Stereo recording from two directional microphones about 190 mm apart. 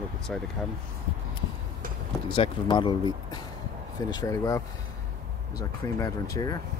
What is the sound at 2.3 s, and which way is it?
Speech, 25° left (ahead or behind).